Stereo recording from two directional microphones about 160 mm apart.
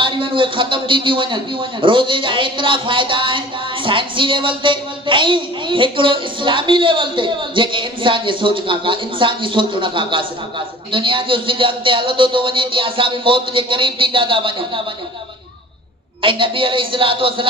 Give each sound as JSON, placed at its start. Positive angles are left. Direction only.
{"t": 0.0, "sound": "a man's voice", "side_deg": -30}
{"t": 16.2, "sound": "a man's voice", "side_deg": -30}